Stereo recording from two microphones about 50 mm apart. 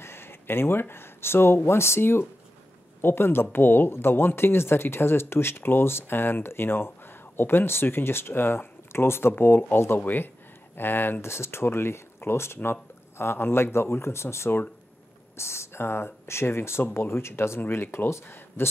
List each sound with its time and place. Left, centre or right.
0.0 s speech: left